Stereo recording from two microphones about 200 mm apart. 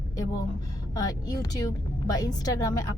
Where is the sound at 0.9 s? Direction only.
20° left (ahead or behind).